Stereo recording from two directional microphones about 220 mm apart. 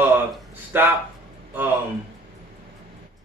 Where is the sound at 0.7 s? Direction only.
10° right (ahead or behind).